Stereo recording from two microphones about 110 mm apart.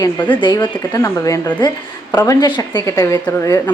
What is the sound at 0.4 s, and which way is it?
Speech, 45° left (ahead or behind).